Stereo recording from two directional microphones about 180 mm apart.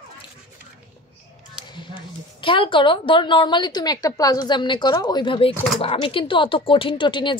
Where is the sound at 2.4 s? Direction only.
30° left (ahead or behind).